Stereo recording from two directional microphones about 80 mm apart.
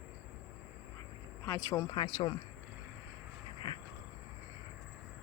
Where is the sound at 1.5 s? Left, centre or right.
Left.